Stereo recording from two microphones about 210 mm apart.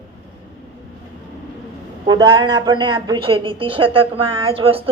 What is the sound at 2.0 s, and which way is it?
A woman's voice, 20° right (ahead or behind).